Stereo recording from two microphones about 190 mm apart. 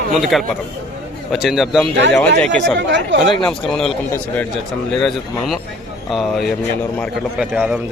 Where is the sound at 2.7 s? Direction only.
70° right (ahead or behind).